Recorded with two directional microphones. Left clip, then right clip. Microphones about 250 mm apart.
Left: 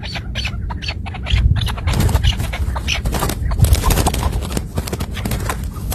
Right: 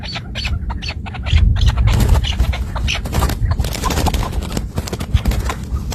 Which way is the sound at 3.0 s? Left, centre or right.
Centre.